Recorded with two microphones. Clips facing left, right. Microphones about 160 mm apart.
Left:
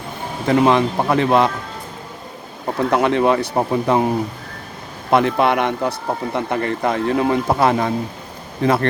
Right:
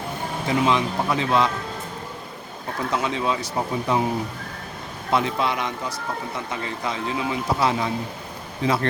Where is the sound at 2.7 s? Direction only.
60° left (ahead or behind).